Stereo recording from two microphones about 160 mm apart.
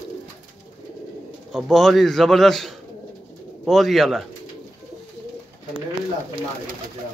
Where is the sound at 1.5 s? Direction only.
Centre (ahead or behind).